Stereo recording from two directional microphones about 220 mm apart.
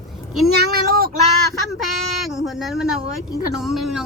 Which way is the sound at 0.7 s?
45° right (ahead or behind).